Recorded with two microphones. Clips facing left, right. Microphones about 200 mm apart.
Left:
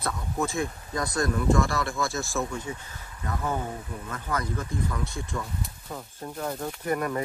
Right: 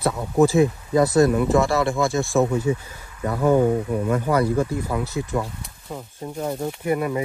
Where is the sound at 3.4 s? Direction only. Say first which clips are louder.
Right 15 dB; 90° right.